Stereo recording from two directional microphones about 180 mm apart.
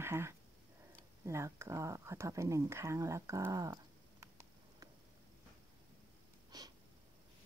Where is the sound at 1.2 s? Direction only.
15° right (ahead or behind).